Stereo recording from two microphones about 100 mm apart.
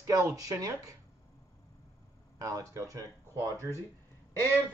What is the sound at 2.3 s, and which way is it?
Speech, 35° right (ahead or behind).